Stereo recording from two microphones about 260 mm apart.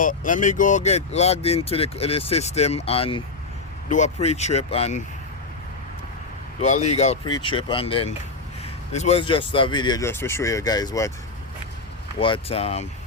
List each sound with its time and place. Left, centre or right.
0.0 s speech: left
6.6 s speech: left
12.2 s speech: left